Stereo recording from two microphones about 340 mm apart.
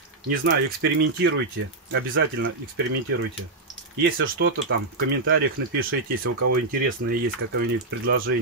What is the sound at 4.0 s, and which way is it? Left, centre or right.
Speech, right.